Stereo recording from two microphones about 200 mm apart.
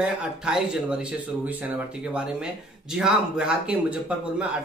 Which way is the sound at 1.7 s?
5° right (ahead or behind).